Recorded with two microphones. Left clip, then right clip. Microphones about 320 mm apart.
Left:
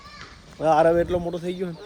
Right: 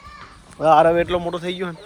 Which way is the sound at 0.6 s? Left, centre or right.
Right.